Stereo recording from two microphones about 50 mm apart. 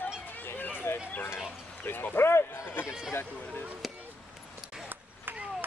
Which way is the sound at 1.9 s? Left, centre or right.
Left.